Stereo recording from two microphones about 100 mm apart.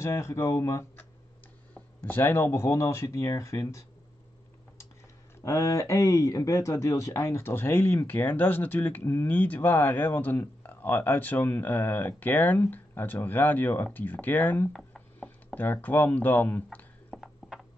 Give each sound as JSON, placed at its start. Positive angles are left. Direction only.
{"t": 0.0, "sound": "speech", "side_deg": 25}
{"t": 5.4, "sound": "speech", "side_deg": 35}
{"t": 17.1, "sound": "a sound", "side_deg": -5}